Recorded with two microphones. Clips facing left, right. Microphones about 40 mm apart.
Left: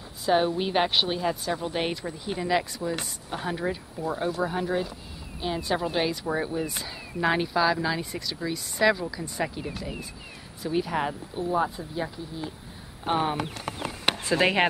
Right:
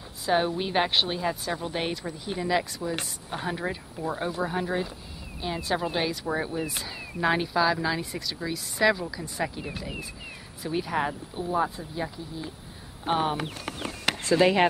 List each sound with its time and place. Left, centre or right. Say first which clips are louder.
0.2 s speech: left 2 dB; centre
14.3 s speech: right 2 dB; left